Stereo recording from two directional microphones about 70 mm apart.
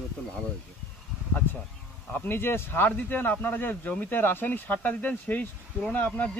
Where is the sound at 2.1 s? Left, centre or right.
Left.